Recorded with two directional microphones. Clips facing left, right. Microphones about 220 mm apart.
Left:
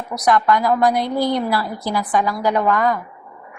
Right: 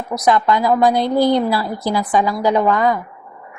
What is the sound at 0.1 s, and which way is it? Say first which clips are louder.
A woman's voice: right 1 dB; 25° right (ahead or behind).